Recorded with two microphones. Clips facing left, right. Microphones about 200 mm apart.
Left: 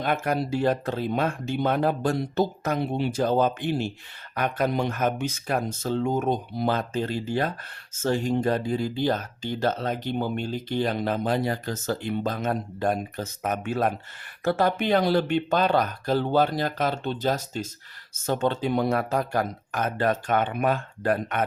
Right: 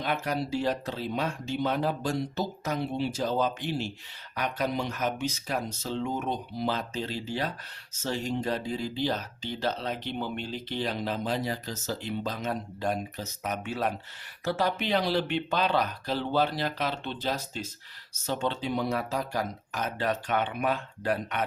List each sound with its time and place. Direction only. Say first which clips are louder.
0.0 s speech: left 4 dB; 50° left (ahead or behind)